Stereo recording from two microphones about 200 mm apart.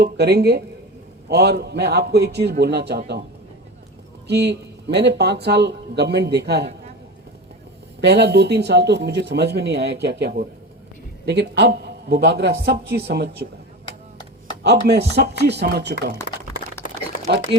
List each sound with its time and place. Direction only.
0.0 s speech: 55° right (ahead or behind)
4.3 s speech: 55° right (ahead or behind)
8.0 s speech: 55° right (ahead or behind)
14.6 s speech: 55° right (ahead or behind)